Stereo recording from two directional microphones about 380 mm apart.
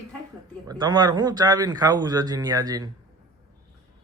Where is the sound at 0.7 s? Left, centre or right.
Centre.